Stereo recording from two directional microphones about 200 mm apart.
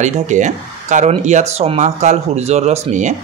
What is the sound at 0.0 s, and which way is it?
Speech, 35° right (ahead or behind).